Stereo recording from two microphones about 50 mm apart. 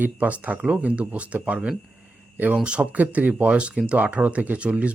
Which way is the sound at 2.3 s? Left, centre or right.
Right.